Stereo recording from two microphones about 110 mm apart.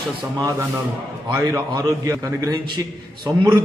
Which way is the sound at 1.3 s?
30° right (ahead or behind).